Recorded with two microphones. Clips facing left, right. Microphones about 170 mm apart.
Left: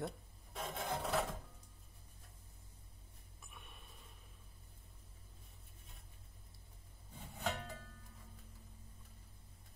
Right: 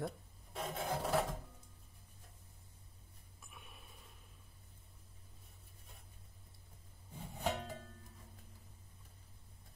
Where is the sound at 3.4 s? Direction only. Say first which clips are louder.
Right 1 dB; centre (ahead or behind).